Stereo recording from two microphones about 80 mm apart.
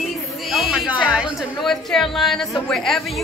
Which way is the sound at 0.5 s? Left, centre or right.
Centre.